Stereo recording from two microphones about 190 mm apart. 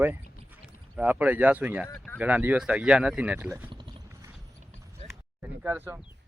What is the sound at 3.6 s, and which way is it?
Clip-clop, 25° right (ahead or behind).